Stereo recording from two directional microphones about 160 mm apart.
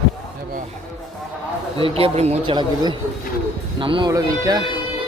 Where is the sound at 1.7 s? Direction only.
35° right (ahead or behind).